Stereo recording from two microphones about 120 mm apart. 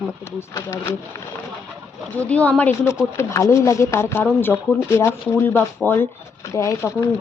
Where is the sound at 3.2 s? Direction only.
25° left (ahead or behind).